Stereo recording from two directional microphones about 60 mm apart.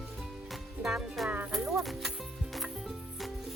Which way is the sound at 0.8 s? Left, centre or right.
Right.